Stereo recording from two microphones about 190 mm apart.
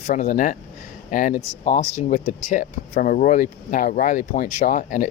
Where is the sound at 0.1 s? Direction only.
40° left (ahead or behind).